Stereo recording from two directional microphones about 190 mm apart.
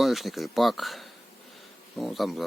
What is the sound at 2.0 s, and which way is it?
Speech, centre (ahead or behind).